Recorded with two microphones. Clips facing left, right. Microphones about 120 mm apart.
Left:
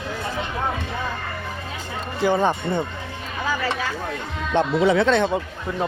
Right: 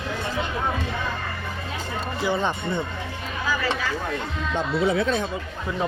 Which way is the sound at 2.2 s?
50° left (ahead or behind).